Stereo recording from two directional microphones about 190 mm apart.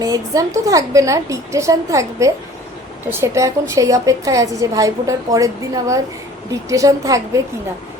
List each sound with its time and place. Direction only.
0.0 s a woman's voice: 20° right (ahead or behind)